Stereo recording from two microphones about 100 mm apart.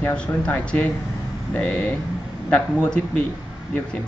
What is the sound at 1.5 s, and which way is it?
A man's voice, 15° left (ahead or behind).